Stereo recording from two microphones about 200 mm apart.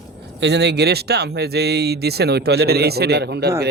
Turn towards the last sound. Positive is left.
turn(degrees=-55)  # may be behind; listen again after turning